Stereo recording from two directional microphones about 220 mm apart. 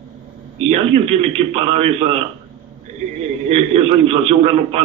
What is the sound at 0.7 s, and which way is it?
A man's voice, 25° right (ahead or behind).